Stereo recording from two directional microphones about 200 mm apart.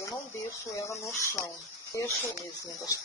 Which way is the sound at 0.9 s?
15° left (ahead or behind).